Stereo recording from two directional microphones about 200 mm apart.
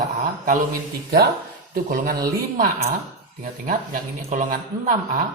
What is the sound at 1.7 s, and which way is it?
A man's voice, 45° right (ahead or behind).